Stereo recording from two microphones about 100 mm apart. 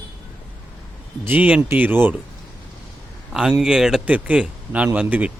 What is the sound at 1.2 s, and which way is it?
Speech, 20° right (ahead or behind).